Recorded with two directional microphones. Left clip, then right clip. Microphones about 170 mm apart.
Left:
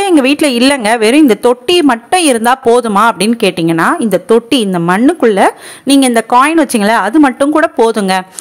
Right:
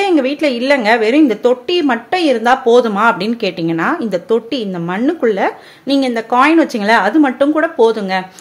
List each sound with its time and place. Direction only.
0.0 s speech: 35° left (ahead or behind)